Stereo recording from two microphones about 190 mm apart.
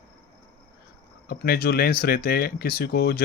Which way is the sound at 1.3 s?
55° left (ahead or behind).